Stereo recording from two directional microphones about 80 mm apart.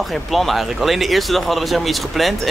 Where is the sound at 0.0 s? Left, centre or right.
Centre.